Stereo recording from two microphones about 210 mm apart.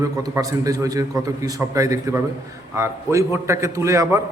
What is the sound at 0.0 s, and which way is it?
A man's voice, 15° right (ahead or behind).